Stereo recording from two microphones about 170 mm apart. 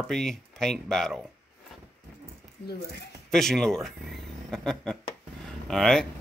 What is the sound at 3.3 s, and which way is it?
Speech, centre (ahead or behind).